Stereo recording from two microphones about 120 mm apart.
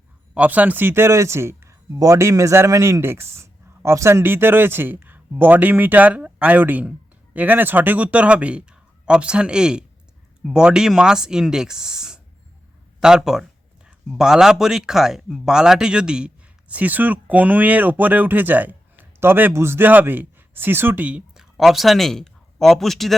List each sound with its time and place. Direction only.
0.3 s speech: 15° right (ahead or behind)